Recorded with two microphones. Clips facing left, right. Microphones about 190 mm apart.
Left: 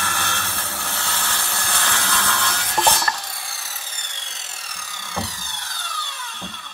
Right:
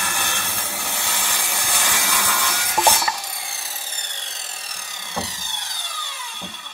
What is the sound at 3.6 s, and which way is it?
Vehicle, 30° right (ahead or behind).